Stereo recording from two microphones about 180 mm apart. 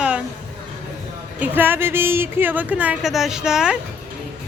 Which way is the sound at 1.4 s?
10° right (ahead or behind).